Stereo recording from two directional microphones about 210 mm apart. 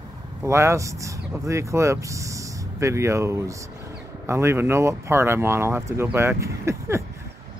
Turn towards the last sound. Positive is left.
turn(degrees=-15)  # may be behind; listen again after turning